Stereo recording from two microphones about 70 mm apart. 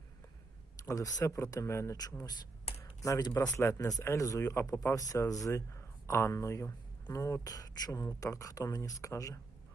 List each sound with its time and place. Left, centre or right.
0.9 s speech: left
1.2 s speech: left
3.0 s speech: left
3.2 s speech: left
4.0 s speech: left
4.9 s speech: left
7.5 s speech: left